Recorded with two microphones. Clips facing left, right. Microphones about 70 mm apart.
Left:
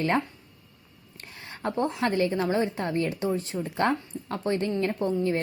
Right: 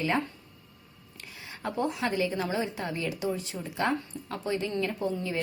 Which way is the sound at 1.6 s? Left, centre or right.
Left.